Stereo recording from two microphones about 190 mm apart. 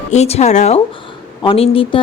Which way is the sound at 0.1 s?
35° left (ahead or behind).